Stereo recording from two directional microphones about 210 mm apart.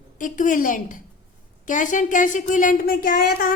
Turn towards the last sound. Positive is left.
turn(degrees=45)  # may be behind; listen again after turning